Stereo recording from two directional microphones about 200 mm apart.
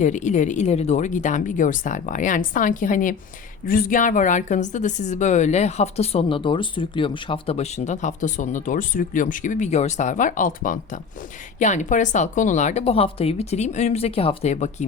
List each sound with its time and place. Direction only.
0.0 s a woman's voice: 35° left (ahead or behind)